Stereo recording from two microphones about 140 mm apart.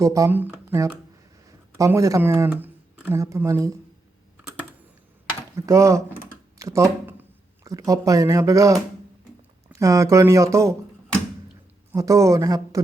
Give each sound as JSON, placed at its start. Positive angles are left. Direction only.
{"t": 0.0, "sound": "speech", "side_deg": -20}
{"t": 5.5, "sound": "speech", "side_deg": -20}
{"t": 11.9, "sound": "speech", "side_deg": -20}